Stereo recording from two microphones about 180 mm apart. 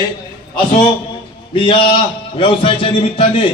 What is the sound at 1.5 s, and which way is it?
A man's voice, 30° left (ahead or behind).